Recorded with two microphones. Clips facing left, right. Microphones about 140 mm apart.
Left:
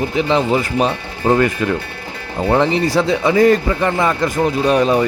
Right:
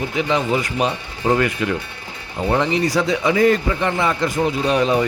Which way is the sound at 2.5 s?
30° left (ahead or behind).